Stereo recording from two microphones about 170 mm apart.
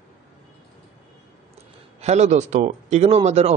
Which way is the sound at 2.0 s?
40° right (ahead or behind).